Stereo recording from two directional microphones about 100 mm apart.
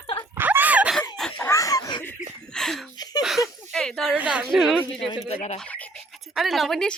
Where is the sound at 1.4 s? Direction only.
30° left (ahead or behind).